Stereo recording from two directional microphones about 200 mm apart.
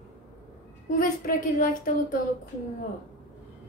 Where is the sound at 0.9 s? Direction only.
40° left (ahead or behind).